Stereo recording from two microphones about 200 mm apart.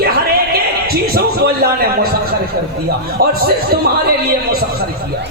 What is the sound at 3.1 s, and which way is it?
Speech, 50° right (ahead or behind).